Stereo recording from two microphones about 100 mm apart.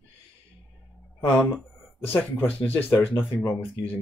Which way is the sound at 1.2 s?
15° left (ahead or behind).